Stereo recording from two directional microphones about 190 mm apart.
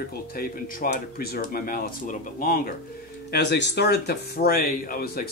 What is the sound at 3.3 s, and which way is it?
Speech, 65° left (ahead or behind).